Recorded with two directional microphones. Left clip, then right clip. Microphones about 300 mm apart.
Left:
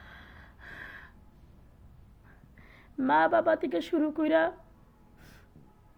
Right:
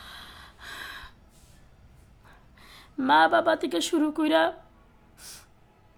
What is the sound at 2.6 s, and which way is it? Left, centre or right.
Speech, centre.